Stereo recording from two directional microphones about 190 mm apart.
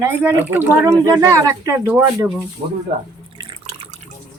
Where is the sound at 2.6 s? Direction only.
35° right (ahead or behind).